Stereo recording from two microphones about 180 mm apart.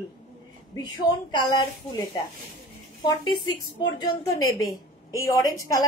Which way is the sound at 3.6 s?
25° left (ahead or behind).